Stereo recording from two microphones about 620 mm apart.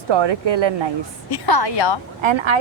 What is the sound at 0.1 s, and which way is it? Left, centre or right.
Speech, right.